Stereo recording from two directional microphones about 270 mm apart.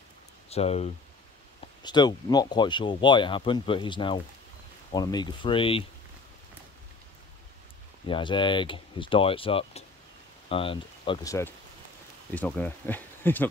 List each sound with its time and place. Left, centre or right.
0.5 s speech: left
8.1 s speech: centre